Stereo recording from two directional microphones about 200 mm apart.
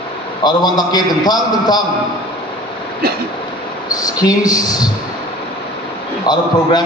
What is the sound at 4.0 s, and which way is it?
Speech, 20° left (ahead or behind).